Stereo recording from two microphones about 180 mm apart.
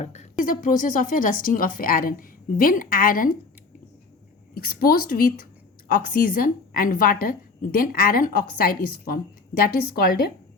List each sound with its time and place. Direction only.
0.0 s a woman's voice: 40° left (ahead or behind)
4.5 s a woman's voice: 55° left (ahead or behind)